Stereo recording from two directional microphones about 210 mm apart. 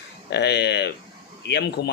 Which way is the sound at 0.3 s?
55° left (ahead or behind).